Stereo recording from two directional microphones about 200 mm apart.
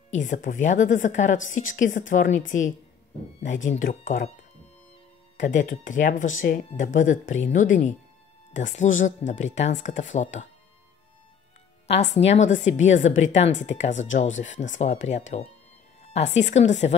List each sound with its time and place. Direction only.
0.2 s a woman's voice: 40° left (ahead or behind)
5.4 s a woman's voice: 40° left (ahead or behind)
11.9 s a woman's voice: 35° left (ahead or behind)